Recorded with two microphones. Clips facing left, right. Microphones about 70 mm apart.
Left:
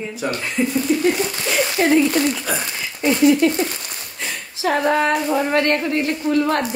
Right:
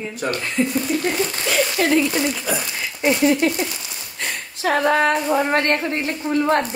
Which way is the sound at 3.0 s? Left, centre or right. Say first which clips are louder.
Left 2 dB; right.